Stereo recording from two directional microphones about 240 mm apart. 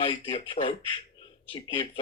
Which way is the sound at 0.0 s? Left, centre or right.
Left.